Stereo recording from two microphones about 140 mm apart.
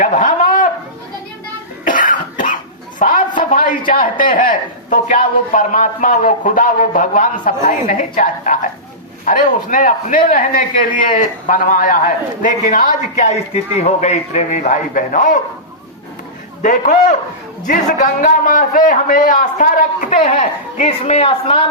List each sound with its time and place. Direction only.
0.0 s a sound: 65° left (ahead or behind)
1.8 s cough: 70° left (ahead or behind)
3.0 s a man's voice: 75° left (ahead or behind)
16.6 s a man's voice: 65° left (ahead or behind)
21.0 s a woman's voice: 40° left (ahead or behind)